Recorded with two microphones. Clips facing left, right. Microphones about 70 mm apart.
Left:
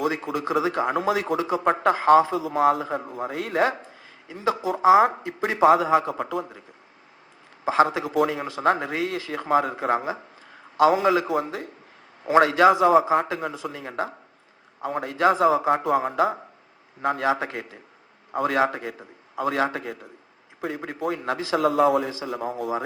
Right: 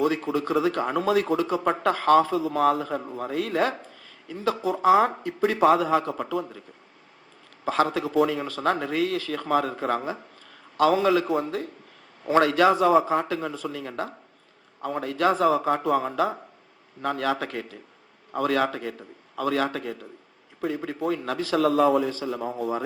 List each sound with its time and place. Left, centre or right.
0.1 s a man's voice: centre
7.6 s a man's voice: centre
22.1 s a man's voice: left